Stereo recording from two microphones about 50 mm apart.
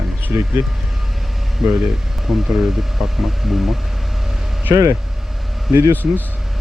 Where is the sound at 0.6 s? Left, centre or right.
Right.